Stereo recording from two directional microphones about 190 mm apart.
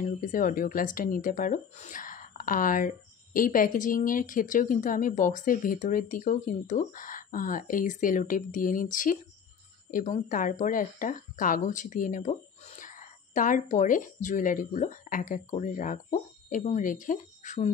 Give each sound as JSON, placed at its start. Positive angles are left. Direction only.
{"t": 0.0, "sound": "a woman's voice", "side_deg": 45}